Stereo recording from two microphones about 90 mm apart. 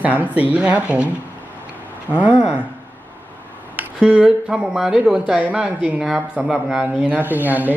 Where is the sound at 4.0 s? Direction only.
10° right (ahead or behind).